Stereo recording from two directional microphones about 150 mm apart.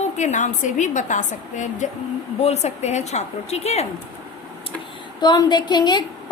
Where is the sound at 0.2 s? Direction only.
50° left (ahead or behind).